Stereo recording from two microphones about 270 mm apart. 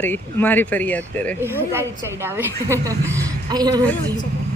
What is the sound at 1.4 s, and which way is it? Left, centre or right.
A woman's voice, centre.